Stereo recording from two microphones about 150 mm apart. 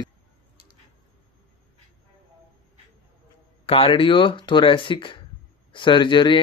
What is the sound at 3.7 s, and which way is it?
Speech, 35° left (ahead or behind).